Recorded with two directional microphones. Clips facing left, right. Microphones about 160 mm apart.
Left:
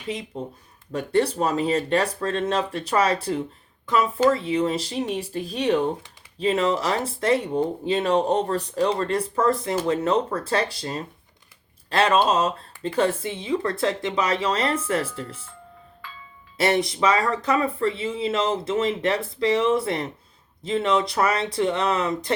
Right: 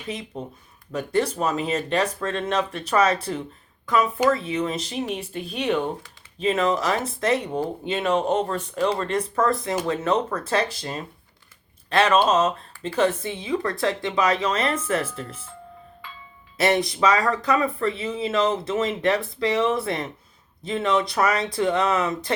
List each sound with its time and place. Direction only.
0.9 s speech: 30° left (ahead or behind)
16.6 s speech: 30° left (ahead or behind)